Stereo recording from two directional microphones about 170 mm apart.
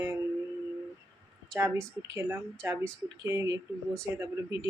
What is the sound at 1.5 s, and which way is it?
Speech, 15° right (ahead or behind).